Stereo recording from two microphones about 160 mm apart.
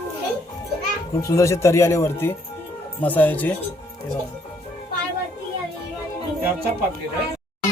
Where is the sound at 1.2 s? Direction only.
20° left (ahead or behind).